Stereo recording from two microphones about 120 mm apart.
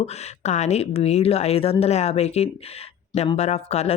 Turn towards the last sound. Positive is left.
turn(degrees=65)  # may be behind; listen again after turning